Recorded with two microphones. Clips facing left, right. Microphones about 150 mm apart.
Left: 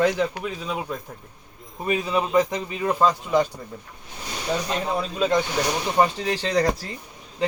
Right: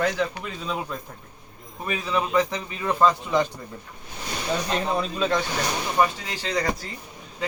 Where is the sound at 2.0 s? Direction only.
20° left (ahead or behind).